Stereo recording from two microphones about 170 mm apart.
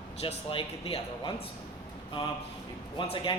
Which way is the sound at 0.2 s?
35° left (ahead or behind).